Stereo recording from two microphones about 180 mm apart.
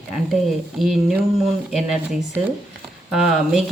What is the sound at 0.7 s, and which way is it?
Speech, centre (ahead or behind).